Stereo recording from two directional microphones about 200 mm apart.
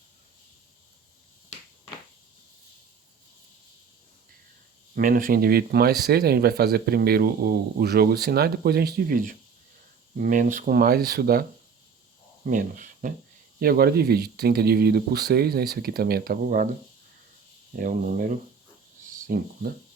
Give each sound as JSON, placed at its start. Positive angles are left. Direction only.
{"t": 4.9, "sound": "speech", "side_deg": -45}
{"t": 12.5, "sound": "speech", "side_deg": -40}
{"t": 17.7, "sound": "speech", "side_deg": -40}